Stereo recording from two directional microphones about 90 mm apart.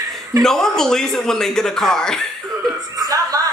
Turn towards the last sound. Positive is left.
turn(degrees=-40)  # may be behind; listen again after turning